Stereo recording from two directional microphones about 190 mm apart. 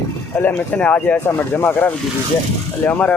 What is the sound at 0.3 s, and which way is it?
Speech, 10° left (ahead or behind).